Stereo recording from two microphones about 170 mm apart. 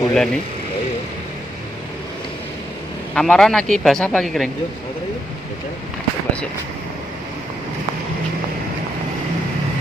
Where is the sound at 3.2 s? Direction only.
Centre (ahead or behind).